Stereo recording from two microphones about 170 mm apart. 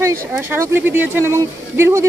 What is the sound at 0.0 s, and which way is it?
Speech, 15° right (ahead or behind).